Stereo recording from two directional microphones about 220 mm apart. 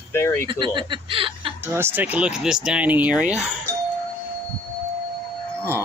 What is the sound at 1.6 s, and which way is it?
Speech, 10° right (ahead or behind).